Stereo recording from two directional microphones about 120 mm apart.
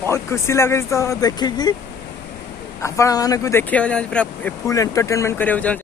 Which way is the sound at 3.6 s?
10° left (ahead or behind).